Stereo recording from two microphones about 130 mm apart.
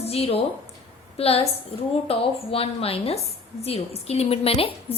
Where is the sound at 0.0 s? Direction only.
50° left (ahead or behind).